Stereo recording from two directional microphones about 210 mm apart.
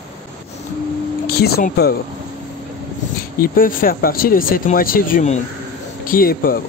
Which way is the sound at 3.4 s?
45° left (ahead or behind).